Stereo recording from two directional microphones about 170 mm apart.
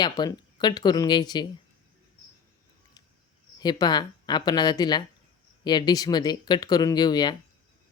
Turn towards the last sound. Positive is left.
turn(degrees=25)  # may be behind; listen again after turning